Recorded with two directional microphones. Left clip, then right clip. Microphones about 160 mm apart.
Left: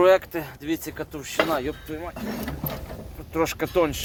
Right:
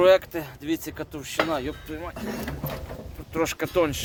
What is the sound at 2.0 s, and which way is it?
Speech, centre (ahead or behind).